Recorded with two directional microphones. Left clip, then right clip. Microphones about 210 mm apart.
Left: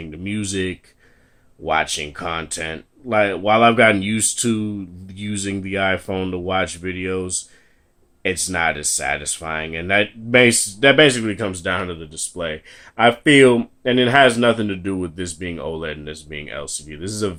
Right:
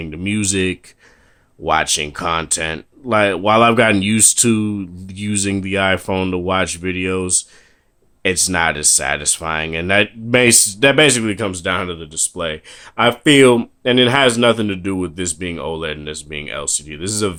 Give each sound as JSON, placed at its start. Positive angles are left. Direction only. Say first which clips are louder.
{"t": 0.0, "sound": "speech", "louder": "right 6 dB", "side_deg": -45}